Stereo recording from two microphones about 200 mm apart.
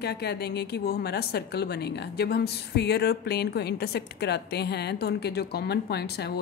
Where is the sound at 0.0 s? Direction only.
55° left (ahead or behind).